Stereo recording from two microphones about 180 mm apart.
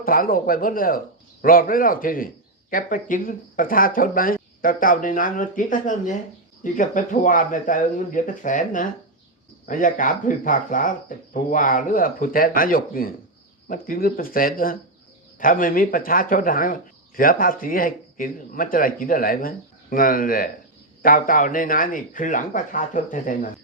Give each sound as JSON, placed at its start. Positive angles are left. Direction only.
{"t": 0.0, "sound": "a man's voice", "side_deg": 50}